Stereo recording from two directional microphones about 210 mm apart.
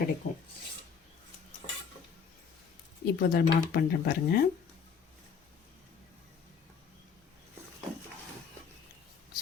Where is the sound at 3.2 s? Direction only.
45° left (ahead or behind).